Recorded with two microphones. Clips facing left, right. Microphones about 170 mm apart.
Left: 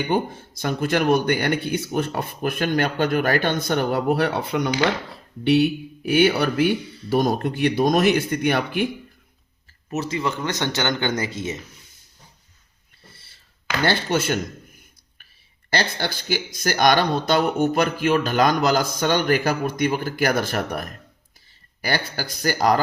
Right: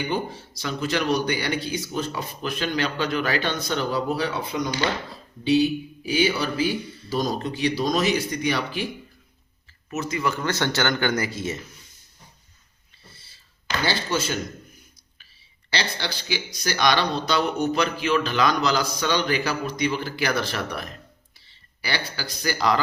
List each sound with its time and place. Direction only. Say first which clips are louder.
0.1 s speech: left 5 dB; 50° left (ahead or behind)
9.9 s speech: left 1 dB; 30° left (ahead or behind)
13.1 s a sound: left 1 dB; 60° left (ahead or behind)
15.7 s speech: left 4 dB; 50° left (ahead or behind)